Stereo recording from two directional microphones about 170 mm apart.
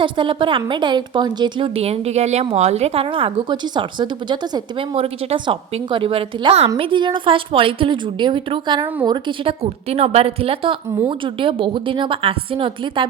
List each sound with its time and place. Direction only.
0.0 s a woman's voice: 30° right (ahead or behind)